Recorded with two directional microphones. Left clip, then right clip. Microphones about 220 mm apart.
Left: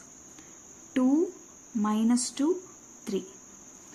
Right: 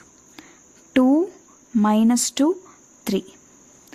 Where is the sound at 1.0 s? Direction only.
45° right (ahead or behind).